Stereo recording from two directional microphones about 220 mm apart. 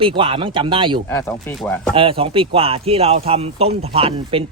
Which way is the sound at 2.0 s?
25° right (ahead or behind).